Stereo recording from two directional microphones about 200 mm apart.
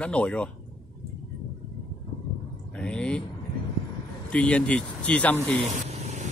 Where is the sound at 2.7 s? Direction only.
5° left (ahead or behind).